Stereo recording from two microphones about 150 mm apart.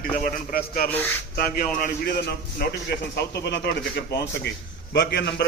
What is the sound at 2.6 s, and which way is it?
Speech, 90° left.